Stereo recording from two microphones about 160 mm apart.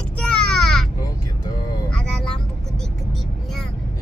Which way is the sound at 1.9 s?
5° left (ahead or behind).